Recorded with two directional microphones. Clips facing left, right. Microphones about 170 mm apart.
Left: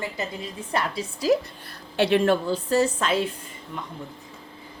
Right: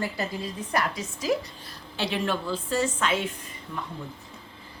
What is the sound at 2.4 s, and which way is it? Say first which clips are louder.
Speech: left 5 dB; 40° left (ahead or behind).